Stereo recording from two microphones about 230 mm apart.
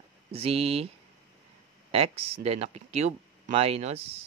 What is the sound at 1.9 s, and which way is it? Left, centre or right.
Speech, right.